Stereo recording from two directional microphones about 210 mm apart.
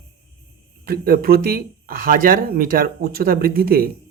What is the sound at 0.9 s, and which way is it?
Speech, 45° right (ahead or behind).